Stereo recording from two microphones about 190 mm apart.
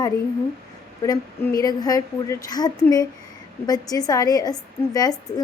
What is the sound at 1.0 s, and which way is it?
A woman's voice, 20° left (ahead or behind).